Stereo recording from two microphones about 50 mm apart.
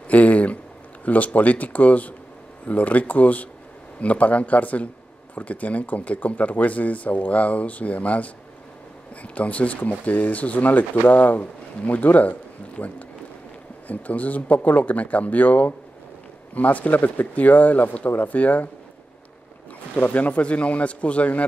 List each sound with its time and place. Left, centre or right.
0.1 s speech: left
20.0 s speech: left